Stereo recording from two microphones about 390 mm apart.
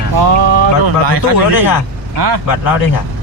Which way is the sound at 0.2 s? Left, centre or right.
Right.